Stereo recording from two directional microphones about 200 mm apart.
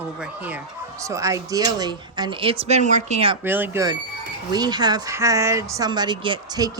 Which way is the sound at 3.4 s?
10° right (ahead or behind).